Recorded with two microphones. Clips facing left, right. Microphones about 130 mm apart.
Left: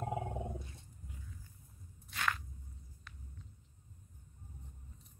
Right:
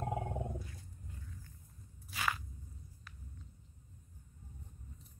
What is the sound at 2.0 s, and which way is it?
Walk, 5° right (ahead or behind).